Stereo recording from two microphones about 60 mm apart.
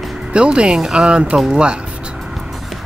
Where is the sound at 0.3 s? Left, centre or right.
Centre.